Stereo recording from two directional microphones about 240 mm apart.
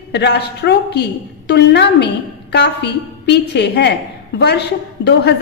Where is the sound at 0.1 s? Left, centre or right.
Left.